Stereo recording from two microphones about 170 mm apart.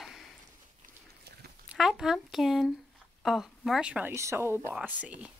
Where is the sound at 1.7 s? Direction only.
5° right (ahead or behind).